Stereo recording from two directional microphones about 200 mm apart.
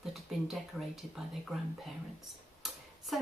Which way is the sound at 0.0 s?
Centre (ahead or behind).